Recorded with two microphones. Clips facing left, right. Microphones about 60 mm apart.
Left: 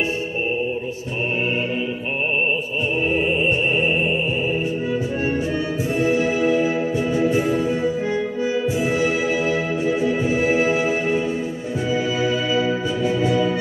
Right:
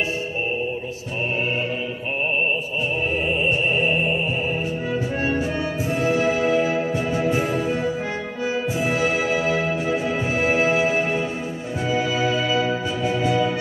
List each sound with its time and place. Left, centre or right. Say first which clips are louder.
6.0 s music: even; right
12.4 s music: left 1 dB; left
13.3 s music: left 1 dB; right